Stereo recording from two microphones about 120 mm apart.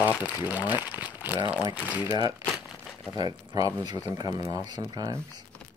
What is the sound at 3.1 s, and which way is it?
Speech, 35° right (ahead or behind).